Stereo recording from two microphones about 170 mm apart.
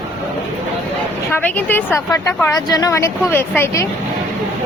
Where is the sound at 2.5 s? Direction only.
20° left (ahead or behind).